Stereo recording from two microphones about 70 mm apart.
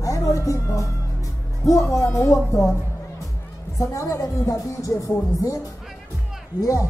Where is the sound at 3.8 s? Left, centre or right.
Left.